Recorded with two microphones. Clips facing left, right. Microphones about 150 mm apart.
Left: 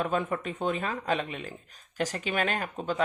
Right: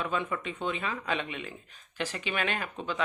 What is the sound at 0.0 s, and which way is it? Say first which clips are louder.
Speech: left 3 dB; 45° left (ahead or behind).